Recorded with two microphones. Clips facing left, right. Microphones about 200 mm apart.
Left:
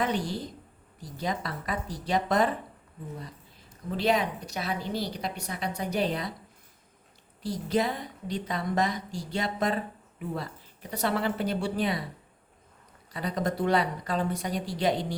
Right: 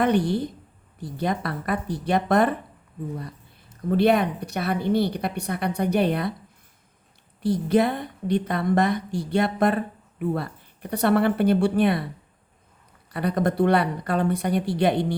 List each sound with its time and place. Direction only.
0.0 s a woman's voice: 60° right (ahead or behind)
3.8 s a woman's voice: 60° right (ahead or behind)
7.4 s a woman's voice: 60° right (ahead or behind)
13.1 s a woman's voice: 60° right (ahead or behind)